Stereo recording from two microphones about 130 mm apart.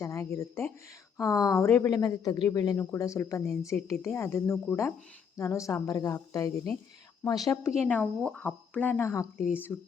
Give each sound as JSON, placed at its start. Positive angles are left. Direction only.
{"t": 0.0, "sound": "a sound", "side_deg": 25}
{"t": 1.1, "sound": "speech", "side_deg": 25}
{"t": 7.8, "sound": "speech", "side_deg": 10}